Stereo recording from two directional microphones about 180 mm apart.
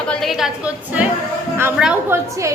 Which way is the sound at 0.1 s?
Centre (ahead or behind).